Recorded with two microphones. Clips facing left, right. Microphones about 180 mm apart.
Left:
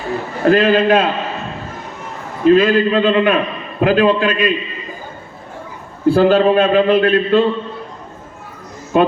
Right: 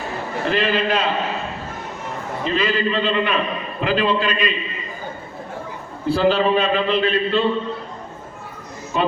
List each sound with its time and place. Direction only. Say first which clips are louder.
0.4 s a man's voice: left 9 dB; 45° left (ahead or behind)
2.4 s a man's voice: left 11 dB; 50° left (ahead or behind)
6.1 s a man's voice: left 6 dB; 45° left (ahead or behind)
8.9 s a man's voice: left 8 dB; 50° left (ahead or behind)